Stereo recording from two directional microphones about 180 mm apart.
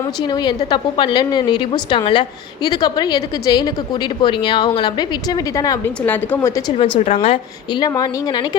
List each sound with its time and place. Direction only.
0.2 s a woman's voice: 20° left (ahead or behind)
6.7 s a woman's voice: 25° left (ahead or behind)